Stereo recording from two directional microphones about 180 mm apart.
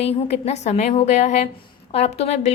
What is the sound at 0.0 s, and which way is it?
Speech, 35° left (ahead or behind).